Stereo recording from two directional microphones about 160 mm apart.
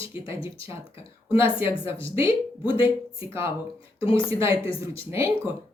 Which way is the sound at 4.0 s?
35° left (ahead or behind).